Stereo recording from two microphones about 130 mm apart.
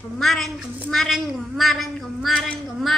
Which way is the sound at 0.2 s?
Centre (ahead or behind).